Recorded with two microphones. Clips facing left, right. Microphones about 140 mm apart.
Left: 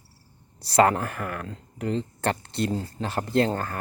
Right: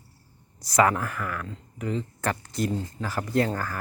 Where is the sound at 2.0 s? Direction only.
30° left (ahead or behind).